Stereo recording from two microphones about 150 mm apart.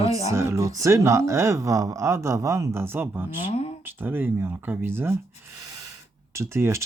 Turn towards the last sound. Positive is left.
turn(degrees=-15)  # may be behind; listen again after turning